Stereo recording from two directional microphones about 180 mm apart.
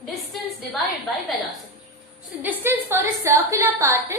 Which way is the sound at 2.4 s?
10° right (ahead or behind).